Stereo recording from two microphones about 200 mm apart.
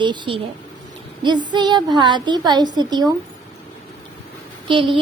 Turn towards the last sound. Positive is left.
turn(degrees=-25)  # may be behind; listen again after turning